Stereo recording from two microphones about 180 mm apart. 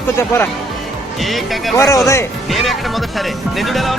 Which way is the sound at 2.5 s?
Centre (ahead or behind).